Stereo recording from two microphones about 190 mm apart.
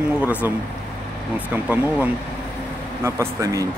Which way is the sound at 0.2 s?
10° right (ahead or behind).